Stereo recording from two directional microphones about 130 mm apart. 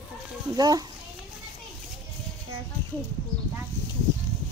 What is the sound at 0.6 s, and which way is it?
Speech, 30° right (ahead or behind).